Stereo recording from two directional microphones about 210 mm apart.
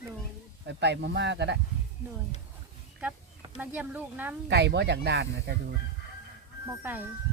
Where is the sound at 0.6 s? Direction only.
55° right (ahead or behind).